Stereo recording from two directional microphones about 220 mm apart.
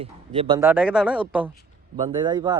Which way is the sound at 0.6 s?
5° right (ahead or behind).